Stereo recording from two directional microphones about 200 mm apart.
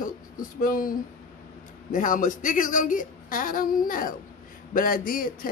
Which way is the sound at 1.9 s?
40° left (ahead or behind).